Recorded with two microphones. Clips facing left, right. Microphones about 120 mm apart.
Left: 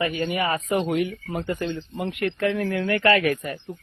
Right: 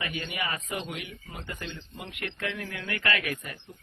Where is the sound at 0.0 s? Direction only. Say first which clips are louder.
Left 10 dB; 40° left (ahead or behind).